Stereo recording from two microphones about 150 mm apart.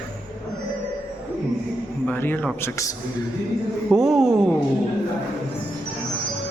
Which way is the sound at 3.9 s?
Centre (ahead or behind).